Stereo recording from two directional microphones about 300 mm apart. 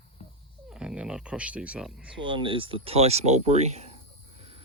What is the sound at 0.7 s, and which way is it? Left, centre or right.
Speech, centre.